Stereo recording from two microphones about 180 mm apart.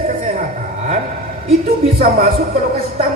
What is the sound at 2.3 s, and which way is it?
Speech, 35° right (ahead or behind).